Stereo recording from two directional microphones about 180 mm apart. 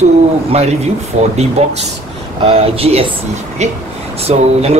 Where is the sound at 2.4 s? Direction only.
35° right (ahead or behind).